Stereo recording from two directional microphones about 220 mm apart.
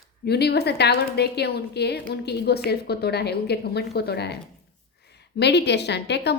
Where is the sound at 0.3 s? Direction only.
50° left (ahead or behind).